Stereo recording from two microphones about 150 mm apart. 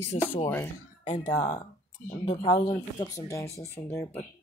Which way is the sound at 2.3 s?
35° left (ahead or behind).